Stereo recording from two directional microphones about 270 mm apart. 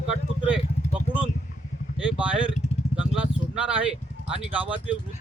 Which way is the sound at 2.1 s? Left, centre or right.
Centre.